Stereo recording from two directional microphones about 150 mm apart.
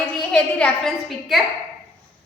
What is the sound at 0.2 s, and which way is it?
A woman's voice, 5° left (ahead or behind).